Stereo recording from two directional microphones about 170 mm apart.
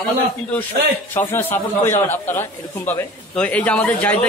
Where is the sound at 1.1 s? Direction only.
10° left (ahead or behind).